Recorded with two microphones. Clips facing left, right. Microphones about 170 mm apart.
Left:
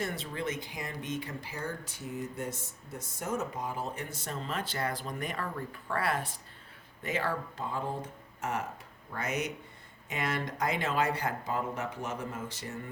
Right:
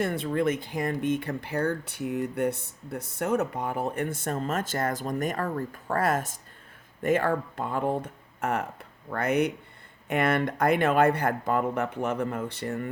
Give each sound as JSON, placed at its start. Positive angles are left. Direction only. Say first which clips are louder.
{"t": 0.0, "sound": "speech", "louder": "right 9 dB", "side_deg": -55}